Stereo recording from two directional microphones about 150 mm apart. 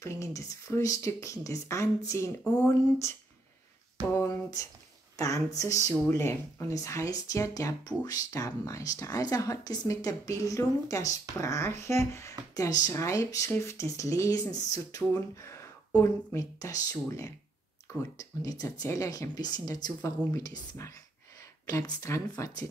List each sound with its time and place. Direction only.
0.0 s speech: 20° left (ahead or behind)
4.1 s speech: 20° left (ahead or behind)